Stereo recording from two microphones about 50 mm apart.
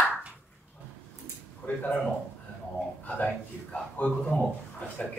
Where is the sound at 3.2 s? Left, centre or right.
Left.